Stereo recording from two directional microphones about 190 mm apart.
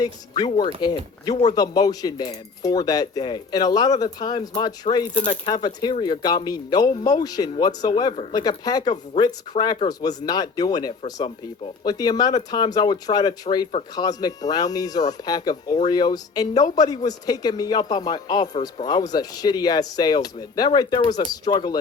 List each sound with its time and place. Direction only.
0.4 s speech: 25° left (ahead or behind)